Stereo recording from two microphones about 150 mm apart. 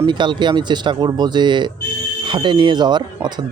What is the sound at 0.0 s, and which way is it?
Speech, 30° right (ahead or behind).